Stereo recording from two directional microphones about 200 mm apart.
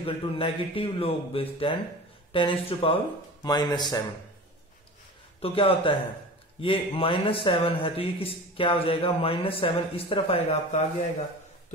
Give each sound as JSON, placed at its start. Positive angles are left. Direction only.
{"t": 0.0, "sound": "speech", "side_deg": 25}
{"t": 5.4, "sound": "speech", "side_deg": 30}